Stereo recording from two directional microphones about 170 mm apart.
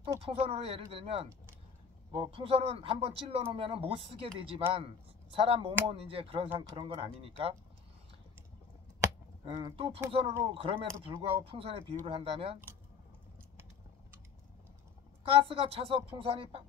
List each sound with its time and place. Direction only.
0.2 s speech: 35° right (ahead or behind)
9.4 s speech: 35° right (ahead or behind)
15.2 s speech: 35° right (ahead or behind)